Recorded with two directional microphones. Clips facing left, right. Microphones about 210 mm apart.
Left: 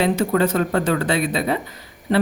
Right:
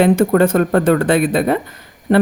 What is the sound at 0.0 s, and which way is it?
Speech, 50° right (ahead or behind).